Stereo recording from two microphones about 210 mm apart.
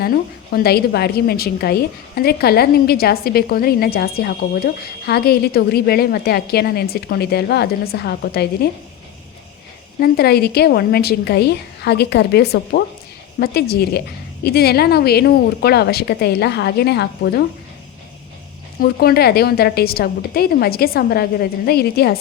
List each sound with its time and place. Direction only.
0.5 s a woman's voice: 50° left (ahead or behind)
10.0 s a woman's voice: 50° left (ahead or behind)
18.8 s a woman's voice: 45° left (ahead or behind)